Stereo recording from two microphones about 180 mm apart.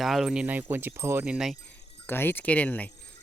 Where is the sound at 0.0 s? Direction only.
Centre (ahead or behind).